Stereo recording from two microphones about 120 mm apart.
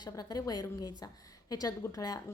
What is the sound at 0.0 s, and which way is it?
A woman's voice, 35° left (ahead or behind).